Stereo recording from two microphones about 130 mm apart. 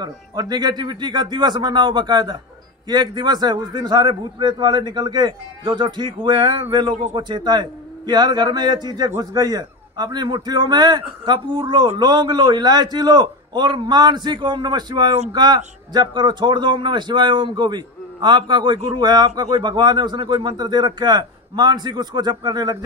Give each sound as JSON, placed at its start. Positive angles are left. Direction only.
{"t": 0.0, "sound": "a man's voice", "side_deg": -30}